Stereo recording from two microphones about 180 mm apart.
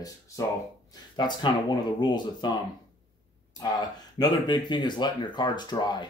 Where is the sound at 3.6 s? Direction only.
20° left (ahead or behind).